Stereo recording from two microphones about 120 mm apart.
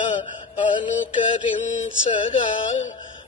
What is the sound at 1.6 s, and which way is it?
Mantra, 80° left.